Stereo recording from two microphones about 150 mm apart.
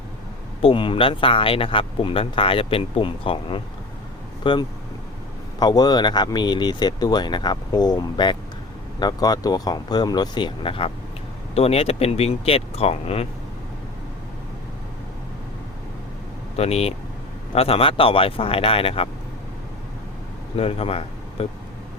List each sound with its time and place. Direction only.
0.6 s speech: 35° left (ahead or behind)
16.6 s speech: 45° left (ahead or behind)
20.6 s speech: 40° left (ahead or behind)